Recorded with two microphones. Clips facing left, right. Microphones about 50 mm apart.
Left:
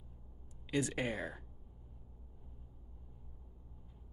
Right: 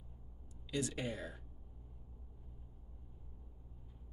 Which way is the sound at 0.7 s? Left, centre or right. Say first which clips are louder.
Left 4 dB; left.